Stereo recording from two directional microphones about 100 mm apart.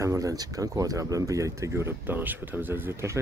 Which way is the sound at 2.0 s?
20° right (ahead or behind).